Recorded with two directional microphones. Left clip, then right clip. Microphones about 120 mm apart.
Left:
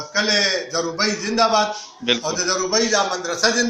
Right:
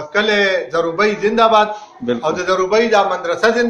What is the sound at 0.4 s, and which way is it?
Speech, 55° right (ahead or behind).